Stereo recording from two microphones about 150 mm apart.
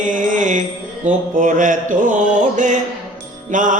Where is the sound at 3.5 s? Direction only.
60° right (ahead or behind).